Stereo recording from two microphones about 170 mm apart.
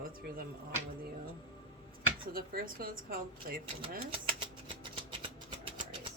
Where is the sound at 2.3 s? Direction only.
60° right (ahead or behind).